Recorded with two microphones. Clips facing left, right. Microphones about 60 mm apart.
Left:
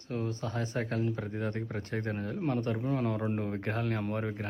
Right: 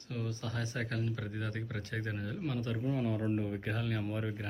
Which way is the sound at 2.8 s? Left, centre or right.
Left.